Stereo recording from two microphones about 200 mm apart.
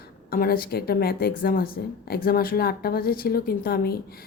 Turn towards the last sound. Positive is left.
turn(degrees=45)  # may be behind; listen again after turning